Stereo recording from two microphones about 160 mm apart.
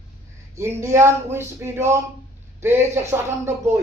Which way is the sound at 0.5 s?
15° right (ahead or behind).